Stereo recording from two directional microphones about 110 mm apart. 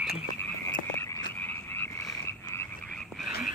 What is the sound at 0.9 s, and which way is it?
Frog, 25° left (ahead or behind).